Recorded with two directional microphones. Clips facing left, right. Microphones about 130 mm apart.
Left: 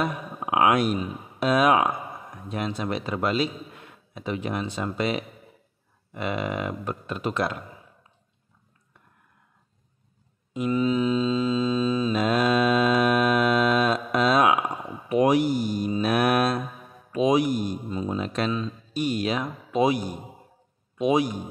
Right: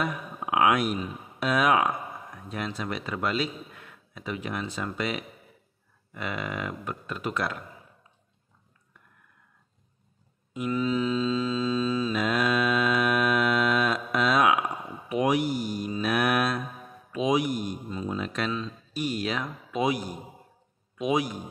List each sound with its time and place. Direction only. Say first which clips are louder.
0.0 s a man's voice: left 3 dB; 30° left (ahead or behind)
10.5 s mantra: left 4 dB; 25° left (ahead or behind)
12.2 s mantra: left 5 dB; 30° left (ahead or behind)
15.0 s speech: left 5 dB; 40° left (ahead or behind)
17.8 s a man's voice: left 3 dB; 25° left (ahead or behind)
18.5 s speech: left 4 dB; 20° left (ahead or behind)
21.0 s a man's voice: left 4 dB; 25° left (ahead or behind)